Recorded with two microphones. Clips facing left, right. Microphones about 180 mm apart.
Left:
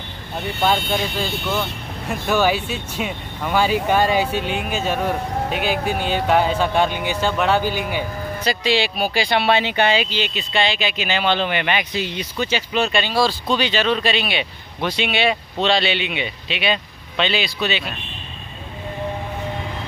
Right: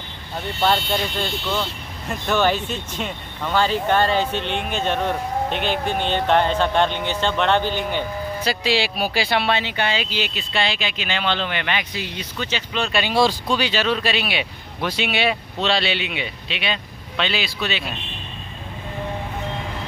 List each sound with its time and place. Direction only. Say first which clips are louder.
0.6 s speech: left 1 dB; 10° left (ahead or behind)
8.5 s speech: left 2 dB; 5° right (ahead or behind)
9.5 s speech: left 5 dB; 15° left (ahead or behind)
10.0 s speech: left 2 dB; 5° right (ahead or behind); by 12.9 s 10° left (ahead or behind)
13.1 s speech: right 5 dB; 20° right (ahead or behind)
13.5 s speech: left 2 dB; 5° right (ahead or behind)